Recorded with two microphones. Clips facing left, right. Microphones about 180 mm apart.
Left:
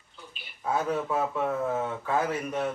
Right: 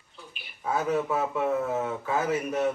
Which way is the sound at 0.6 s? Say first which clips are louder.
Right 1 dB; centre (ahead or behind).